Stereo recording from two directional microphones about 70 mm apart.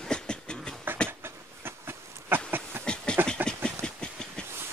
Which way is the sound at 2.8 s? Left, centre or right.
Centre.